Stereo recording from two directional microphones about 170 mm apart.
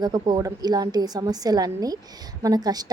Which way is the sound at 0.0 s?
20° right (ahead or behind).